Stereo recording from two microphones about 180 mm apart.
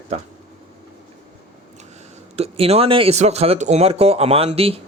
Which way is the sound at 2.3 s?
35° right (ahead or behind).